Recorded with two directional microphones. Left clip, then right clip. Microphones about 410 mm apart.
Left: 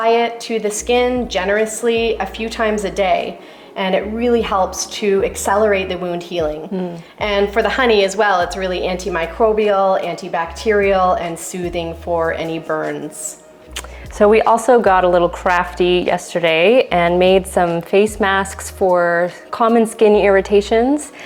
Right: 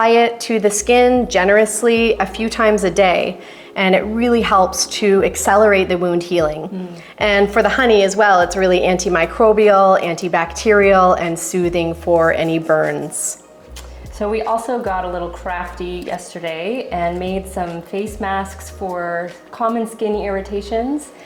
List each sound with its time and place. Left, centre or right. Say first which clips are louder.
0.0 s a woman's voice: right 2 dB; right
14.2 s a woman's voice: left 7 dB; left